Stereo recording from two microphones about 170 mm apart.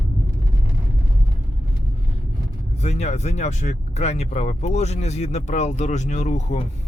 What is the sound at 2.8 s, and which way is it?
Speech, 40° left (ahead or behind).